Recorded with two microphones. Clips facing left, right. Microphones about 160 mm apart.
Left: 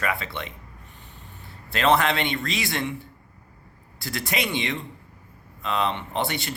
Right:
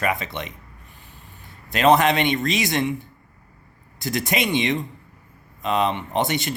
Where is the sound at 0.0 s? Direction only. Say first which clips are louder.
Right 4 dB; 20° right (ahead or behind).